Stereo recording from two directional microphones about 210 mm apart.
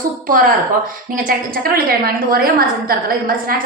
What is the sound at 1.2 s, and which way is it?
A woman's voice, 45° right (ahead or behind).